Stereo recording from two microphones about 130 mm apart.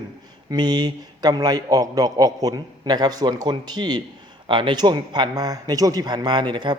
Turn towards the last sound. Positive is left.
turn(degrees=-35)  # may be behind; listen again after turning